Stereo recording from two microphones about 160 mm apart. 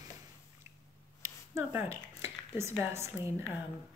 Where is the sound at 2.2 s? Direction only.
15° right (ahead or behind).